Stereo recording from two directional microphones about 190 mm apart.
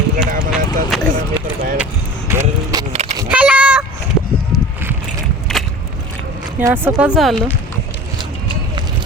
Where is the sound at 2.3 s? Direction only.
15° right (ahead or behind).